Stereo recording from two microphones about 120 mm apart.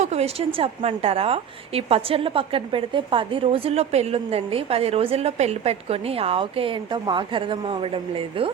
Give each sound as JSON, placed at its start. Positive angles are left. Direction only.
{"t": 0.0, "sound": "a woman's voice", "side_deg": -65}